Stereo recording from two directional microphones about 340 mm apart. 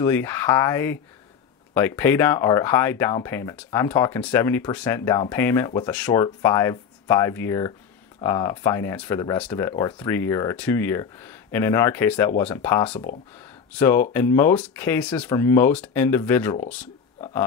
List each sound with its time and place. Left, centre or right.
0.0 s speech: centre